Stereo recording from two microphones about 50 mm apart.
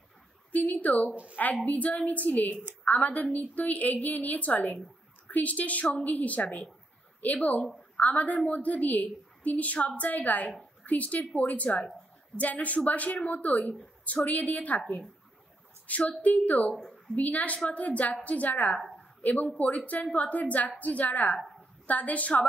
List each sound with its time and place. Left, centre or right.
0.5 s a woman's voice: left
8.0 s a woman's voice: left
15.9 s a woman's voice: left